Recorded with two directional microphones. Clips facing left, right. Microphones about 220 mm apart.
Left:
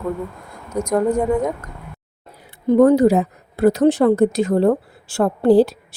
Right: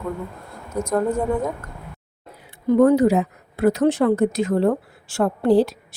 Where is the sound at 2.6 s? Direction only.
35° left (ahead or behind).